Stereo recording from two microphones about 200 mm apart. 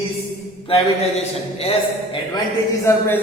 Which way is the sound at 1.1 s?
30° left (ahead or behind).